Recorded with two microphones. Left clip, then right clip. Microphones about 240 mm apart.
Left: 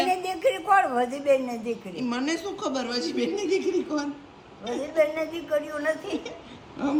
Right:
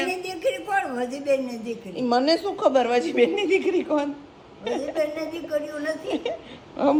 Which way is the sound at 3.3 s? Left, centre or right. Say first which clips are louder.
Right 4 dB; left.